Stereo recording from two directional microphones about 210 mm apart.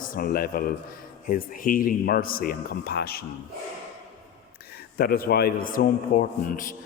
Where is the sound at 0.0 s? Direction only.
45° left (ahead or behind).